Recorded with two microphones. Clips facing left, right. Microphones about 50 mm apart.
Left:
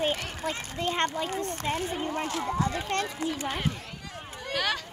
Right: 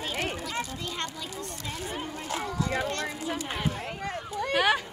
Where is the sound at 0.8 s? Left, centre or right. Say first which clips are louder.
Left 7 dB; left.